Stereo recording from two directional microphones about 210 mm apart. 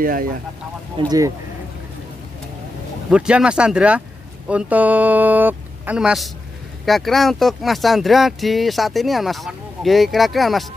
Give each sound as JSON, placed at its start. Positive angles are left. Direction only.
{"t": 0.0, "sound": "speech", "side_deg": -40}
{"t": 1.0, "sound": "speech", "side_deg": -15}
{"t": 3.1, "sound": "speech", "side_deg": -5}